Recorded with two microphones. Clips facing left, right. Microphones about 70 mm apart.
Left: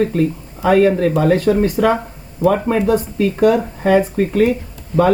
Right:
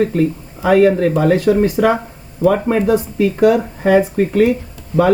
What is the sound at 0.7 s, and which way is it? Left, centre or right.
Speech, centre.